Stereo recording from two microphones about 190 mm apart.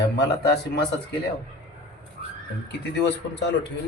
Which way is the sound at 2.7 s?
65° left (ahead or behind).